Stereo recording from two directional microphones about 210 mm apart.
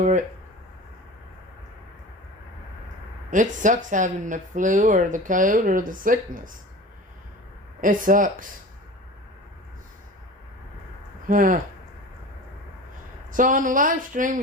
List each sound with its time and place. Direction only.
0.0 s a sound: 35° right (ahead or behind)
3.2 s speech: 35° right (ahead or behind)
7.8 s speech: 40° right (ahead or behind)
11.3 s speech: 40° right (ahead or behind)
13.3 s speech: 40° right (ahead or behind)